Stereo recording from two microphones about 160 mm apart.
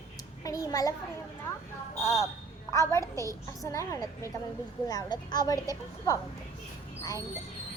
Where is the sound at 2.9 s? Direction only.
20° right (ahead or behind).